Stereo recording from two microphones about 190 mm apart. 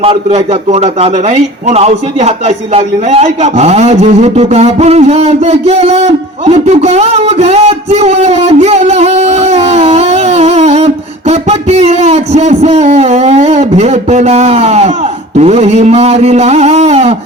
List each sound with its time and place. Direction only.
0.0 s a man's voice: 30° right (ahead or behind)